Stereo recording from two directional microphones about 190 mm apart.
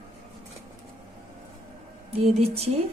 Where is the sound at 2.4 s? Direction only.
35° right (ahead or behind).